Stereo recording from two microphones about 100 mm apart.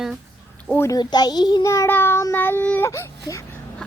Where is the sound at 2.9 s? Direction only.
30° left (ahead or behind).